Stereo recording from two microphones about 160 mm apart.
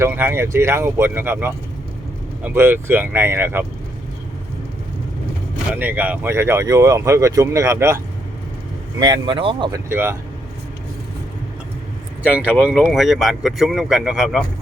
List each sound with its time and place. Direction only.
0.0 s speech: 15° right (ahead or behind)
5.7 s speech: 10° right (ahead or behind); by 9.8 s 30° right (ahead or behind)
9.9 s speech: 15° right (ahead or behind)
12.5 s speech: 5° right (ahead or behind)